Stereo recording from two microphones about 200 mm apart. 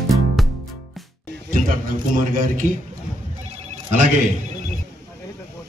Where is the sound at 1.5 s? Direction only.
40° right (ahead or behind).